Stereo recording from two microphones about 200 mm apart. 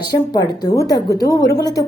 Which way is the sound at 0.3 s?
20° left (ahead or behind).